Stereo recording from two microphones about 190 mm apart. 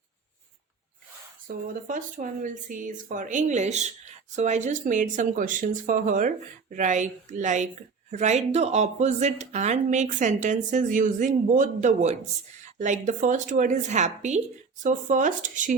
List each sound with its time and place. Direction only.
1.5 s speech: 45° right (ahead or behind)